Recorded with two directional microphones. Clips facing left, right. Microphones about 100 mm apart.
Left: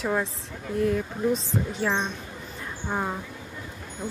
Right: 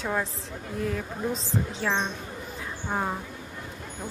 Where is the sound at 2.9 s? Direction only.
Centre (ahead or behind).